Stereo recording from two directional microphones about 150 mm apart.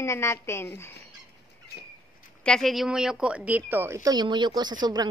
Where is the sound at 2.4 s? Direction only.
5° left (ahead or behind).